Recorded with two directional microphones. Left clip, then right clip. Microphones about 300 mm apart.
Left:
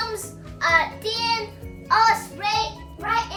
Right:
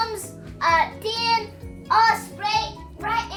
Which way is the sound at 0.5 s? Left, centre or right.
Centre.